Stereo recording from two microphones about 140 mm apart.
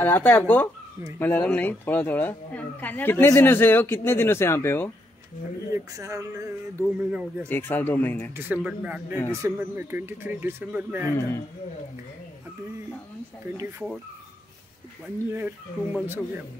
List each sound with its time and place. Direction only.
0.0 s speech: 15° left (ahead or behind)
5.7 s speech: 20° right (ahead or behind)
7.1 s speech: 10° right (ahead or behind)
7.4 s speech: 15° left (ahead or behind)
8.5 s speech: 10° right (ahead or behind)
11.1 s a man's voice: 20° left (ahead or behind)
15.3 s speech: 15° right (ahead or behind)